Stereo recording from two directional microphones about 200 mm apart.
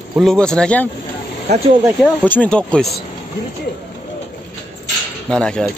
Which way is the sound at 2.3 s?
5° left (ahead or behind).